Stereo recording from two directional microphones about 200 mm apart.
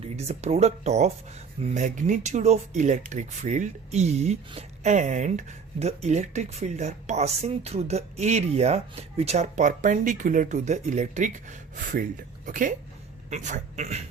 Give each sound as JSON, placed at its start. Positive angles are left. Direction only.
{"t": 0.2, "sound": "speech", "side_deg": -30}